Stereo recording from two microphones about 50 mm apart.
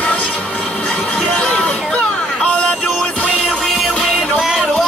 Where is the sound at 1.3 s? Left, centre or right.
Centre.